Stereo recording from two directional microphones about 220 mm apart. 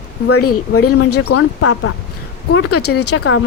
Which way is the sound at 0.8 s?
85° left.